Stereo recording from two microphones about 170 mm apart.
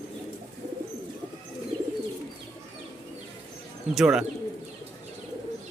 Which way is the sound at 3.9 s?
5° right (ahead or behind).